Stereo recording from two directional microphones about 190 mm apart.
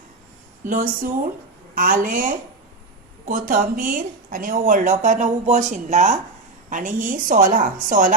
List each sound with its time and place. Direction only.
0.7 s a woman's voice: 45° right (ahead or behind)